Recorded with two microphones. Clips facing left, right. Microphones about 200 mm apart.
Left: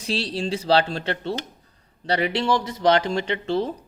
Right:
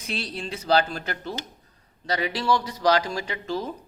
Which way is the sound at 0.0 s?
30° left (ahead or behind).